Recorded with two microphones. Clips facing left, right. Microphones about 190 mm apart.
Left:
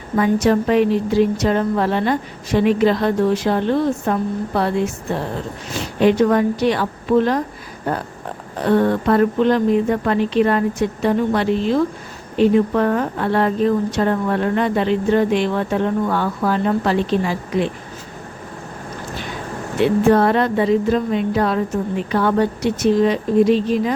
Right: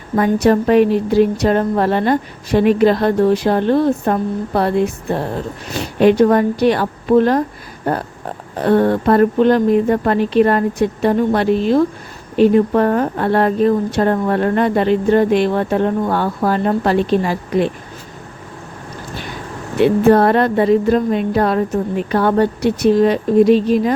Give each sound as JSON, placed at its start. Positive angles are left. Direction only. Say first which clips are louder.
{"t": 0.4, "sound": "a woman's voice", "louder": "right 5 dB", "side_deg": -45}
{"t": 6.0, "sound": "a woman's voice", "louder": "right 3 dB", "side_deg": -50}
{"t": 8.6, "sound": "a woman's voice", "louder": "right 3 dB", "side_deg": -40}
{"t": 20.1, "sound": "a woman's voice", "louder": "right 3 dB", "side_deg": -50}